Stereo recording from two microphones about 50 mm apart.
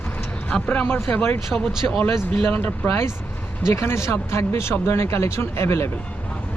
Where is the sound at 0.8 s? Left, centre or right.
Left.